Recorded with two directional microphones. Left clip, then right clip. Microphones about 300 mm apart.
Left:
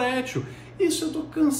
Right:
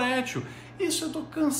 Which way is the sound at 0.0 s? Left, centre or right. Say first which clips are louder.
Left 2 dB; centre.